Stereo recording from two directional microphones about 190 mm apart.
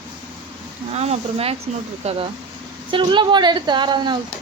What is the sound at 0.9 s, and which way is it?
A woman's voice, 35° right (ahead or behind).